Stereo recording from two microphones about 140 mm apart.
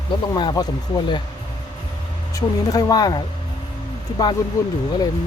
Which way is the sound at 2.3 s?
30° left (ahead or behind).